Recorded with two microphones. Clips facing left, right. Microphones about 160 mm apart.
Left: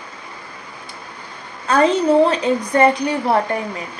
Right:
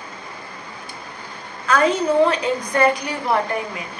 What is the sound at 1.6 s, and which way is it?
A woman's voice, 30° left (ahead or behind).